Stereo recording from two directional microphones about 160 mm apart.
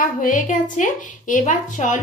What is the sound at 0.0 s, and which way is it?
A woman's voice, 55° left (ahead or behind).